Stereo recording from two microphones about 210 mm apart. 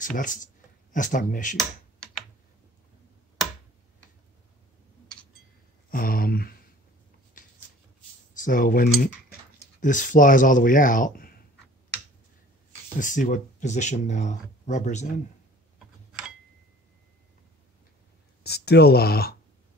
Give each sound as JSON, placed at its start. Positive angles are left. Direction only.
{"t": 0.0, "sound": "speech", "side_deg": 40}
{"t": 5.9, "sound": "a sound", "side_deg": 45}
{"t": 8.4, "sound": "speech", "side_deg": 40}
{"t": 13.0, "sound": "speech", "side_deg": 40}
{"t": 18.4, "sound": "speech", "side_deg": 50}